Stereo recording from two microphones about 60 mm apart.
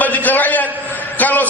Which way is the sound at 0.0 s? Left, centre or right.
Left.